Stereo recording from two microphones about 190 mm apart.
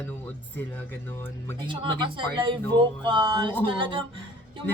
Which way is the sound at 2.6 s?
10° left (ahead or behind).